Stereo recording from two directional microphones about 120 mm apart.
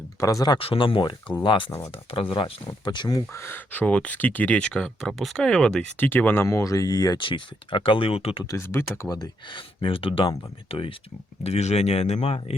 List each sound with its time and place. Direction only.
0.2 s speech: 30° left (ahead or behind)
0.6 s speech: 50° left (ahead or behind)
2.6 s speech: 40° left (ahead or behind)
7.3 s speech: 45° left (ahead or behind)
8.4 s speech: 25° left (ahead or behind)
9.0 s speech: 35° left (ahead or behind); by 10.9 s 50° left (ahead or behind)
11.4 s speech: 65° left (ahead or behind)